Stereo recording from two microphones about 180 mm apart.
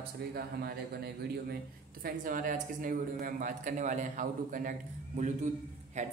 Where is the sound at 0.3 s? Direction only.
60° right (ahead or behind).